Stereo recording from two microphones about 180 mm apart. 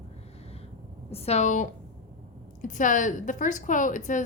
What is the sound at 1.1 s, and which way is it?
A woman's voice, 35° left (ahead or behind).